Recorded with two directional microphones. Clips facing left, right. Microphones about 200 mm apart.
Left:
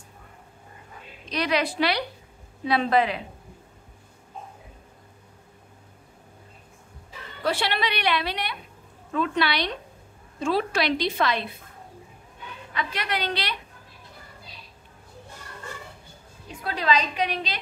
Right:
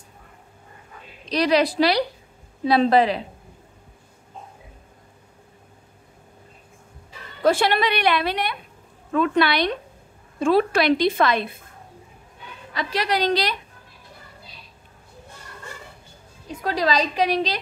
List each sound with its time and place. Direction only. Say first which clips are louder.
1.2 s a woman's voice: right 6 dB; 35° right (ahead or behind)
7.4 s a woman's voice: right 7 dB; 50° right (ahead or behind)
12.7 s a woman's voice: right 6 dB; 35° right (ahead or behind)
16.6 s a woman's voice: right 3 dB; 40° right (ahead or behind)